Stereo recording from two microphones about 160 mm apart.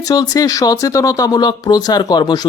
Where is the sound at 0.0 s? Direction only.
25° left (ahead or behind).